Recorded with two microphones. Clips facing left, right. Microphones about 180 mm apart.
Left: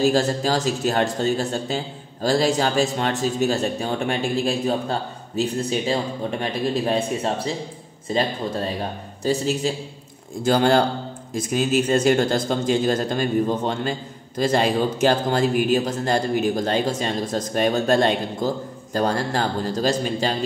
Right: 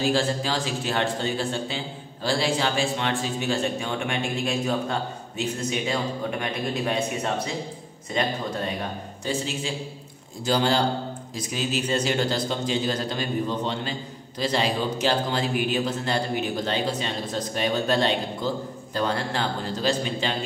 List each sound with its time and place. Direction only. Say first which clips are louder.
0.0 s a man's voice: left 5 dB; 45° left (ahead or behind)
10.4 s a man's voice: left 5 dB; 55° left (ahead or behind)